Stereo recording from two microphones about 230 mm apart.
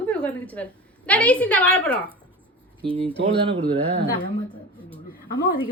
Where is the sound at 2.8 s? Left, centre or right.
Right.